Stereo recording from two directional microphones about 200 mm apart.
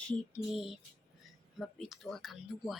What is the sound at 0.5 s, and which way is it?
Speech, centre (ahead or behind).